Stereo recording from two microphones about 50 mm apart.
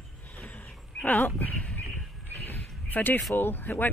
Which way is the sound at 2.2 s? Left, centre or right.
Left.